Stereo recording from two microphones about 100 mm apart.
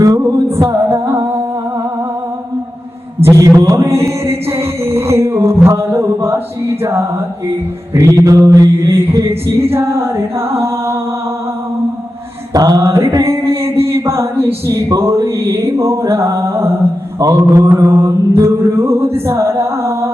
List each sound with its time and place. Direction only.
0.4 s music: 25° right (ahead or behind)
3.2 s music: 30° right (ahead or behind)
7.9 s mantra: 30° right (ahead or behind)
12.5 s mantra: 35° right (ahead or behind)
13.5 s a sound: 25° right (ahead or behind)
17.7 s music: 30° right (ahead or behind)
19.3 s a sound: 25° right (ahead or behind)